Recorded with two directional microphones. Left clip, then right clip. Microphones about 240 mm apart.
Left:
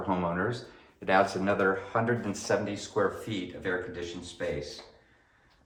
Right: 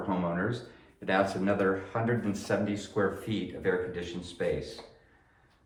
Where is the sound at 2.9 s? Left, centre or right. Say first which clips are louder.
Left 2 dB; centre.